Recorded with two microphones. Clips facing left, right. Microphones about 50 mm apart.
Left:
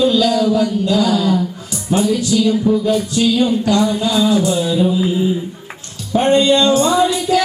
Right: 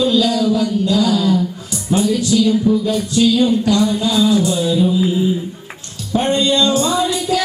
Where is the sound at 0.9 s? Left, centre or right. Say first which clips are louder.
Even; centre.